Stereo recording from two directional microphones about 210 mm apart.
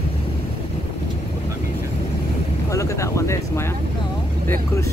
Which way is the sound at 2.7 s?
15° left (ahead or behind).